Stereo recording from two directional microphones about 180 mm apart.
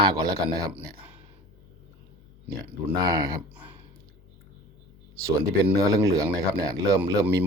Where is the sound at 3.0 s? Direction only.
20° right (ahead or behind).